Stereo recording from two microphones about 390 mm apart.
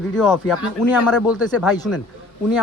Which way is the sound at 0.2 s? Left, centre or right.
Centre.